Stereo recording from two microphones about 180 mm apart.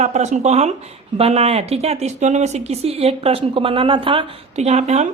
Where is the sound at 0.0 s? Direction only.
40° right (ahead or behind).